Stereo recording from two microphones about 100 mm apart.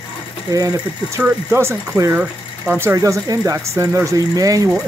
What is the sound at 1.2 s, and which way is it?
Speech, 20° right (ahead or behind).